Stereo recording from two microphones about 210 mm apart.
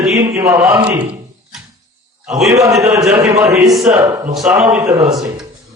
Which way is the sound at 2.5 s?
15° right (ahead or behind).